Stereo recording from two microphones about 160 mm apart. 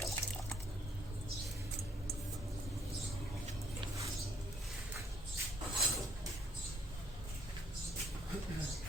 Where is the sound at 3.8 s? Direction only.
20° right (ahead or behind).